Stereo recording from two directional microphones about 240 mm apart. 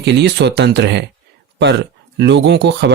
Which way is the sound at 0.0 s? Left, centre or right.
Right.